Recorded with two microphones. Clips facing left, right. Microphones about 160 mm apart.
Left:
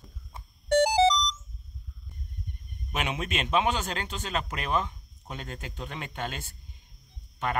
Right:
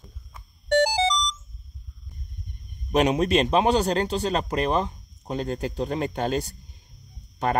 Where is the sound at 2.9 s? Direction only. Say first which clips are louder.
Right 11 dB; 40° right (ahead or behind).